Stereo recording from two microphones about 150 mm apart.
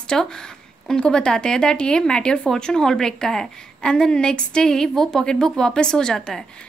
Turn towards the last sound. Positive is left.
turn(degrees=5)  # may be behind; listen again after turning